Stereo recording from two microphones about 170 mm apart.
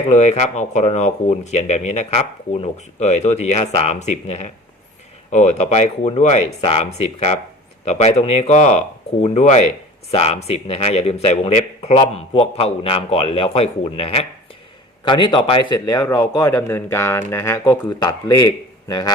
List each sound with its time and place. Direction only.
0.1 s a man's voice: 40° left (ahead or behind)
15.9 s speech: 15° left (ahead or behind)